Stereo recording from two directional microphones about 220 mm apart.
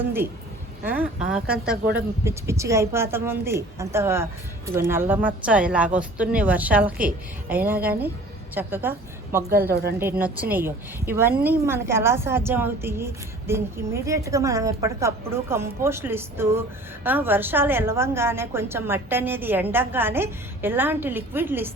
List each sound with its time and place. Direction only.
0.0 s a woman's voice: 10° right (ahead or behind)
2.2 s a woman's voice: 15° right (ahead or behind)
9.5 s a woman's voice: 45° right (ahead or behind)
10.0 s a woman's voice: 10° right (ahead or behind)